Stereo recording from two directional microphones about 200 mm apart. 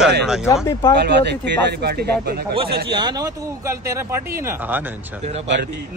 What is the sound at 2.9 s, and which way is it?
A man's voice, 20° right (ahead or behind).